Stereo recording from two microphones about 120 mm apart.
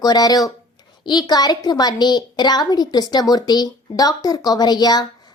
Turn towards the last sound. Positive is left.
turn(degrees=35)  # may be behind; listen again after turning